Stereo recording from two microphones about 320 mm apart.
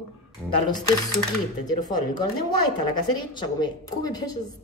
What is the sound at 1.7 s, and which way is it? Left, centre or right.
Speech, left.